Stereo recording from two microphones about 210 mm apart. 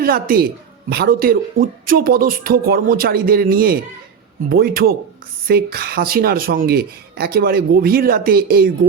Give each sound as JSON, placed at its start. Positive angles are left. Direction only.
{"t": 0.0, "sound": "a woman's voice", "side_deg": -45}